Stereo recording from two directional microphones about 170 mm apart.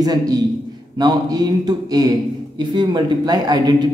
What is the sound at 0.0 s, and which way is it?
Speech, 20° right (ahead or behind).